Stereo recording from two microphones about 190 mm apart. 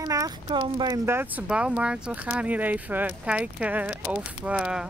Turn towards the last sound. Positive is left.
turn(degrees=-5)  # may be behind; listen again after turning